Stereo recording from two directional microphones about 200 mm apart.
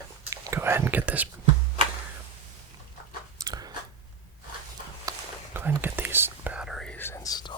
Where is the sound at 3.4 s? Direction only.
20° right (ahead or behind).